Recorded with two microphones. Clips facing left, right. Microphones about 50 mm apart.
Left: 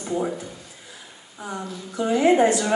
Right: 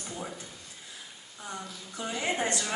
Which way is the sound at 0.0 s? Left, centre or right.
Centre.